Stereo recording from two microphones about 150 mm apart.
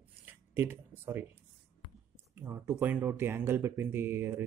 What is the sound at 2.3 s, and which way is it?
Speech, 15° right (ahead or behind).